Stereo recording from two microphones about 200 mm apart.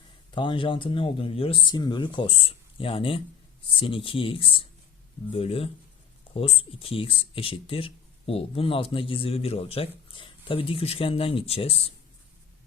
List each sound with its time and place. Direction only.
0.3 s speech: 25° left (ahead or behind)